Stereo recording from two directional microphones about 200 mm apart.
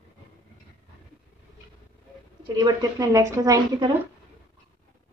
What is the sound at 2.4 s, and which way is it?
A woman's voice, 20° right (ahead or behind).